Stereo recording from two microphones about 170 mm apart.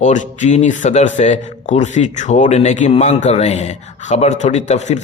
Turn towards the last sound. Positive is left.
turn(degrees=45)  # may be behind; listen again after turning